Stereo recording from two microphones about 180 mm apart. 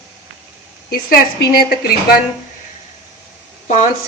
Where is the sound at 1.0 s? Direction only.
55° left (ahead or behind).